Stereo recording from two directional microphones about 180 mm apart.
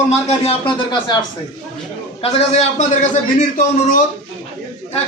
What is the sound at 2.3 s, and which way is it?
A man's voice, 35° left (ahead or behind).